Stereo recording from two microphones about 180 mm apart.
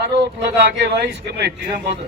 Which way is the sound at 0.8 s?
70° right (ahead or behind).